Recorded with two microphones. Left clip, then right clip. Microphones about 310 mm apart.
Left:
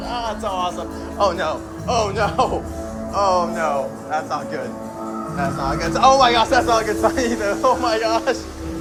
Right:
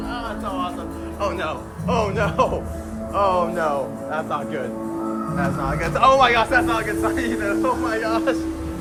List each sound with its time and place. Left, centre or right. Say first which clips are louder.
0.1 s music: left 6 dB; centre
1.9 s speech: left 2 dB; centre
3.2 s speech: left 1 dB; centre
5.4 s speech: left 3 dB; centre